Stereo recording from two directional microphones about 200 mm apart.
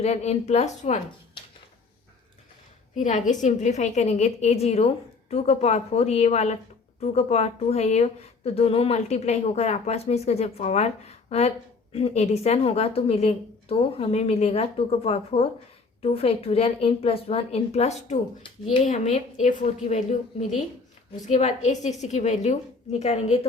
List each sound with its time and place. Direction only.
0.0 s a woman's voice: 30° left (ahead or behind)
3.0 s a woman's voice: 40° left (ahead or behind)
21.2 s a woman's voice: 35° left (ahead or behind)